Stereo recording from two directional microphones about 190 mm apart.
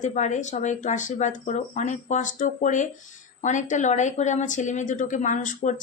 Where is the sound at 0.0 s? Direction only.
40° left (ahead or behind).